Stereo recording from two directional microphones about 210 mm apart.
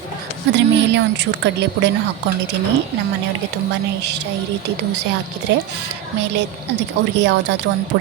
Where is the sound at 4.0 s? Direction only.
55° right (ahead or behind).